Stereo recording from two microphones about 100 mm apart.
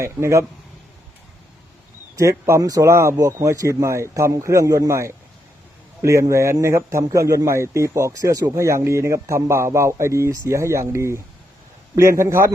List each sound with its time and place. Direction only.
0.0 s a man's voice: 30° right (ahead or behind)
2.3 s a man's voice: 30° right (ahead or behind)